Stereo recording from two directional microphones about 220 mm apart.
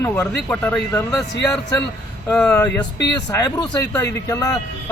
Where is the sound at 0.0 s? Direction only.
10° left (ahead or behind).